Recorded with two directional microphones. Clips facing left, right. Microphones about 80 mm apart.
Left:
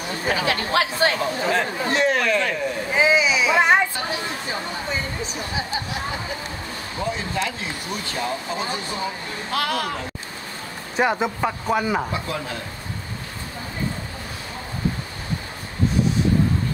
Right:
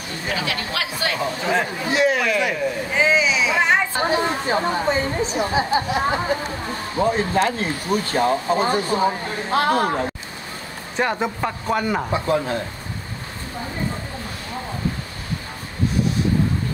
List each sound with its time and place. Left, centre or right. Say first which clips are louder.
0.4 s speech: left 6 dB; left
1.2 s speech: even; centre
2.9 s a sound: left 1 dB; centre
3.9 s a sound: right 7 dB; right
7.0 s speech: right 7 dB; right
11.0 s speech: left 1 dB; centre
12.1 s speech: right 7 dB; right